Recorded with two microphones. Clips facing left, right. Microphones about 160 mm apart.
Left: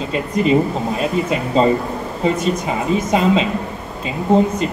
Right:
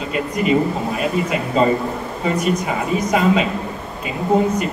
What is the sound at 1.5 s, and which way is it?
A man's voice, 25° left (ahead or behind).